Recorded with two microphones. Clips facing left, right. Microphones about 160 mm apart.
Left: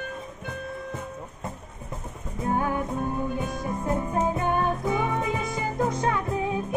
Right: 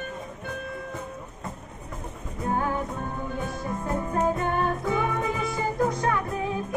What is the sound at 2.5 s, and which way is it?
Music, 15° left (ahead or behind).